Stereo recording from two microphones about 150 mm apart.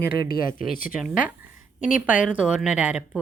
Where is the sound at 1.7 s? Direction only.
60° left (ahead or behind).